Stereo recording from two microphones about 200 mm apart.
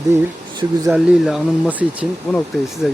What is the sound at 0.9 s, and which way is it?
Speech, 5° right (ahead or behind).